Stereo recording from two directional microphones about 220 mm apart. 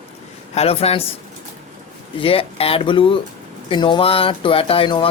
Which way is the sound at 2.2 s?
25° left (ahead or behind).